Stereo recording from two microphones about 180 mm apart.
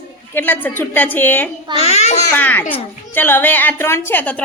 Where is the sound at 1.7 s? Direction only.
35° left (ahead or behind).